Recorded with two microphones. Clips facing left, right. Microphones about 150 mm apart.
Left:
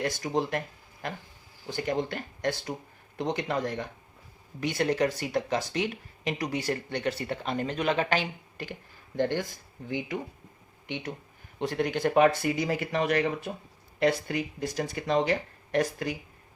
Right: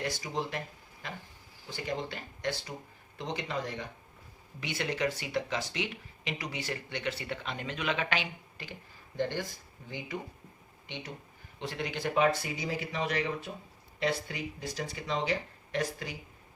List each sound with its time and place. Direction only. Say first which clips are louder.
0.2 s speech: left 7 dB; 55° left (ahead or behind)
1.6 s speech: left 6 dB; 55° left (ahead or behind)
9.1 s speech: left 5 dB; 55° left (ahead or behind)
10.8 s speech: left 7 dB; 60° left (ahead or behind)
11.6 s speech: left 8 dB; 50° left (ahead or behind)